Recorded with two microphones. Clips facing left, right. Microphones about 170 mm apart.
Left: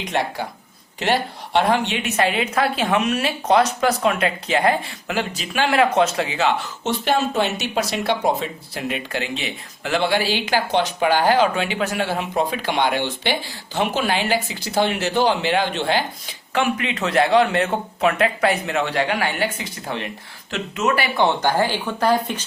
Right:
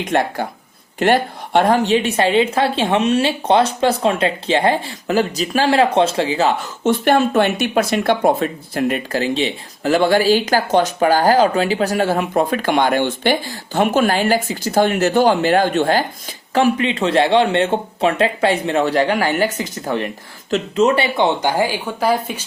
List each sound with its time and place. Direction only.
0.0 s a woman's voice: 50° right (ahead or behind); by 6.5 s 35° right (ahead or behind)
6.8 s speech: 55° right (ahead or behind)
20.5 s speech: 30° right (ahead or behind); by 22.4 s 10° right (ahead or behind)